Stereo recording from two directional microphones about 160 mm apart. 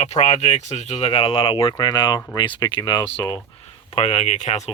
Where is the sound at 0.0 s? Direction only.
40° left (ahead or behind).